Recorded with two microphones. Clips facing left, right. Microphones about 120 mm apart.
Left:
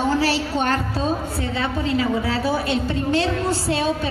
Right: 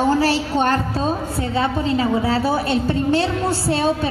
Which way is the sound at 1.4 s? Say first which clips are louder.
Right 3 dB; 30° right (ahead or behind).